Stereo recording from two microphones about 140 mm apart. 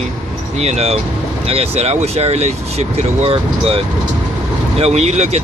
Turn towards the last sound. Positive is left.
turn(degrees=-50)  # may be behind; listen again after turning